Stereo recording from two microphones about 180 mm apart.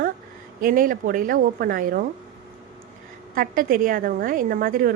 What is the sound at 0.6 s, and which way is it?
A woman's voice, 50° right (ahead or behind).